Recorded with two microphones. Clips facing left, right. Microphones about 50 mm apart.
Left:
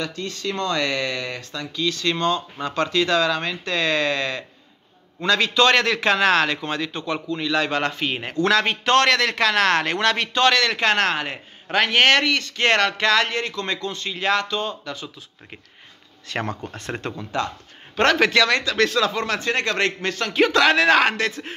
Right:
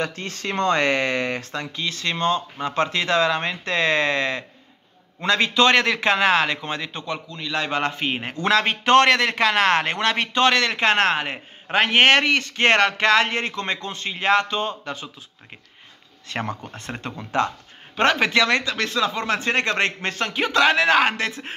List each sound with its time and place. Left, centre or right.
0.0 s a man's voice: right
16.3 s a man's voice: centre
17.2 s a man's voice: right
19.2 s a man's voice: right
20.3 s a man's voice: centre